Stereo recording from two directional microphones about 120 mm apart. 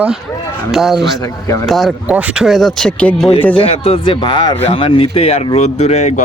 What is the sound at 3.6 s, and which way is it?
Speech, 50° left (ahead or behind).